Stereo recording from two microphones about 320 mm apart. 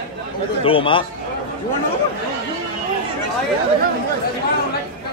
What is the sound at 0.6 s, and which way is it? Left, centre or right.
Speech, centre.